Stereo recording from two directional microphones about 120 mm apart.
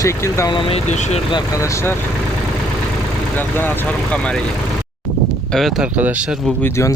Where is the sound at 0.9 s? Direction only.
75° left (ahead or behind).